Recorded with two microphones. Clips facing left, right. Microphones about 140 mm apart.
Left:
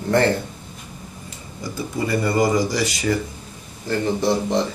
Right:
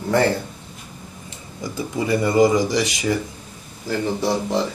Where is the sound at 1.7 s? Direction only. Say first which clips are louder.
Right 1 dB; 15° right (ahead or behind).